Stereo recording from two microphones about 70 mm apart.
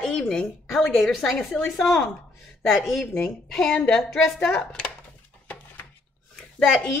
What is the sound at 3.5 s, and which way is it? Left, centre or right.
A woman's voice, centre.